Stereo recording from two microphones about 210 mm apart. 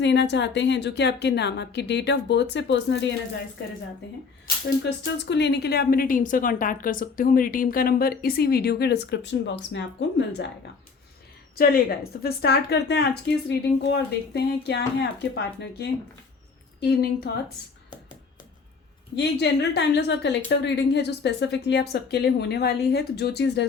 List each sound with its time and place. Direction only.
0.0 s a woman's voice: 55° left (ahead or behind)
5.1 s a woman's voice: 55° left (ahead or behind)
11.5 s a woman's voice: 45° left (ahead or behind)
19.1 s a woman's voice: 55° left (ahead or behind)